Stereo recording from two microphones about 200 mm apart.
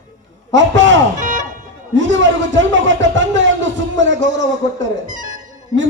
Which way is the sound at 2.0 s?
65° right (ahead or behind).